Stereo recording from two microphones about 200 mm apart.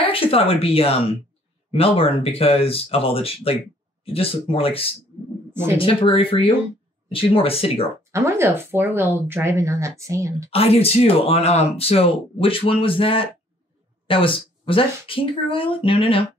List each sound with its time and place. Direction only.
0.1 s speech: 30° left (ahead or behind)
8.1 s speech: 15° right (ahead or behind)
10.5 s speech: 30° left (ahead or behind)